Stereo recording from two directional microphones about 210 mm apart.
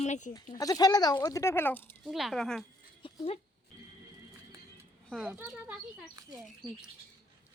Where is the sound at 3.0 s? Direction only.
25° left (ahead or behind).